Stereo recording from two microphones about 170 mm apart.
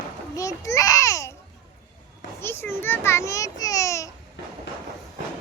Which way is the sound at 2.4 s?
15° left (ahead or behind).